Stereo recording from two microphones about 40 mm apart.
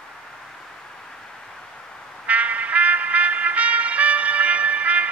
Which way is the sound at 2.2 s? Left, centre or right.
Right.